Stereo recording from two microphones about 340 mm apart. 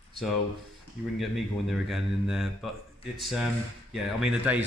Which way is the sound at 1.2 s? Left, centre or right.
Centre.